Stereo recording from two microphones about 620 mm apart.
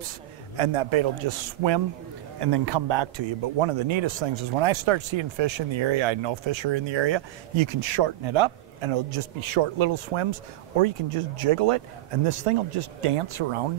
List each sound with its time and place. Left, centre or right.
0.6 s a man's voice: right